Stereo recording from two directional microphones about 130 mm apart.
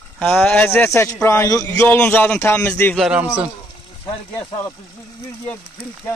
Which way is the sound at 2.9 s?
5° right (ahead or behind).